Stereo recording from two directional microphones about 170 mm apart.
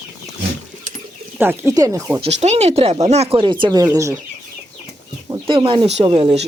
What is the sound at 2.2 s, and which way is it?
Speech, 40° right (ahead or behind).